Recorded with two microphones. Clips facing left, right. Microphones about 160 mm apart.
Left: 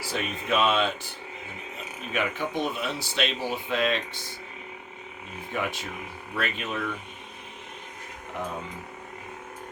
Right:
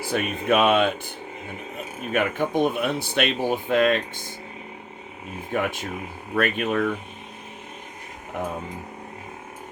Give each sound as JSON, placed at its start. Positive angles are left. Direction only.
{"t": 0.0, "sound": "speech", "side_deg": -55}
{"t": 2.1, "sound": "speech", "side_deg": -50}
{"t": 5.5, "sound": "speech", "side_deg": -50}